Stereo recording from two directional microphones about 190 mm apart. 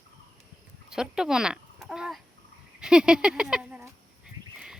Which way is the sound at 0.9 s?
5° right (ahead or behind).